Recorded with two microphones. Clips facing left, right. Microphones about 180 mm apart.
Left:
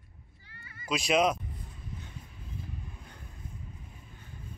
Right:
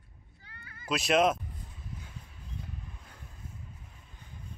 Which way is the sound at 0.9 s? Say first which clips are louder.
Right 1 dB; centre (ahead or behind).